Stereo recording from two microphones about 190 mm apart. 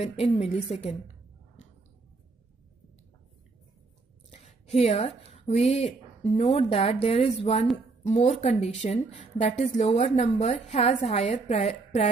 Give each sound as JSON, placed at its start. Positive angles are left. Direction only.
{"t": 0.0, "sound": "a woman's voice", "side_deg": 35}
{"t": 4.3, "sound": "a woman's voice", "side_deg": 35}